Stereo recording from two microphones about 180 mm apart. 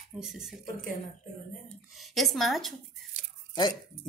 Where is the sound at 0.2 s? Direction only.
5° right (ahead or behind).